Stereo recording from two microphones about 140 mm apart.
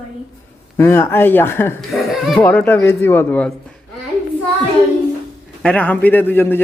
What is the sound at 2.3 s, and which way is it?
A man's voice, 10° left (ahead or behind).